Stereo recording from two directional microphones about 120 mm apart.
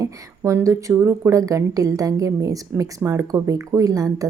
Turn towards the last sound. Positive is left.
turn(degrees=-30)  # may be behind; listen again after turning